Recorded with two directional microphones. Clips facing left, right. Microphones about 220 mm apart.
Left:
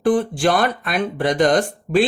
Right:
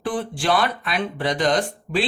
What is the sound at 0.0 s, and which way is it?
Speech, 45° left (ahead or behind).